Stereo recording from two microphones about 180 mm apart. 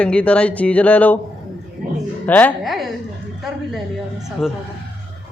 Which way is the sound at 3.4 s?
Centre (ahead or behind).